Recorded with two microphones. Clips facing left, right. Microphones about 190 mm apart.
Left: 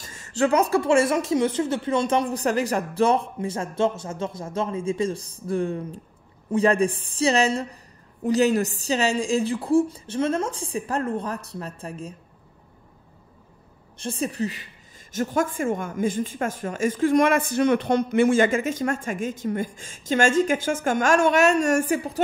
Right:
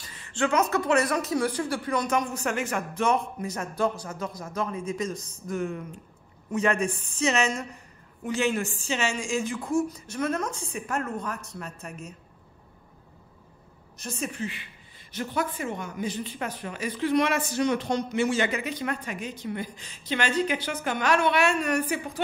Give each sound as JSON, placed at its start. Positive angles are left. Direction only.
{"t": 0.0, "sound": "a woman's voice", "side_deg": 45}
{"t": 13.9, "sound": "a woman's voice", "side_deg": 30}